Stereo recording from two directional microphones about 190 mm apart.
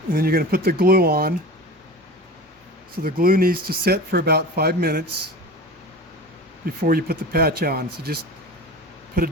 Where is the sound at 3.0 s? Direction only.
50° right (ahead or behind).